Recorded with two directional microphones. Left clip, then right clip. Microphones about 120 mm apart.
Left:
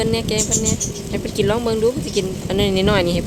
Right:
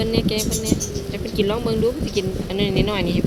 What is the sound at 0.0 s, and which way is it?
Speech, 45° left (ahead or behind).